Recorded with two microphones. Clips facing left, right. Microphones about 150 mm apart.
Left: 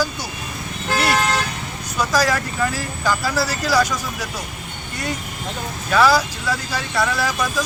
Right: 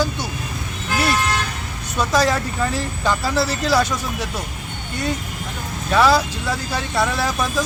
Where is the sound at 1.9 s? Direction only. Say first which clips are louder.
Right 1 dB; 25° right (ahead or behind).